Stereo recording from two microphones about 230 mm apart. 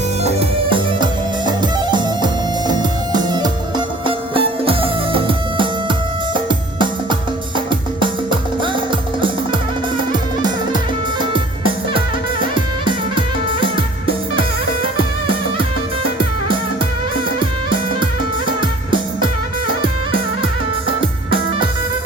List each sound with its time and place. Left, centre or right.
0.3 s music: right
10.1 s music: centre
21.2 s music: left